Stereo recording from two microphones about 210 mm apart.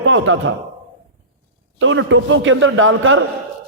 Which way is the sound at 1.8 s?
65° right (ahead or behind).